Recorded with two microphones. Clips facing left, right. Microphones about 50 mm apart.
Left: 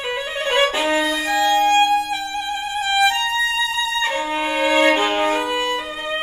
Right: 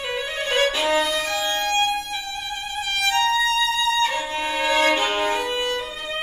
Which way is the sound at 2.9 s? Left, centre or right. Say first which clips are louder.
Left 2 dB; centre.